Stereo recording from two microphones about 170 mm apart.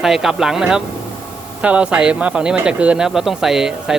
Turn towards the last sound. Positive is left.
turn(degrees=-5)  # may be behind; listen again after turning